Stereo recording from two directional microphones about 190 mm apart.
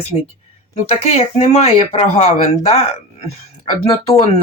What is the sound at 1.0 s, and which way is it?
Speech, 35° left (ahead or behind).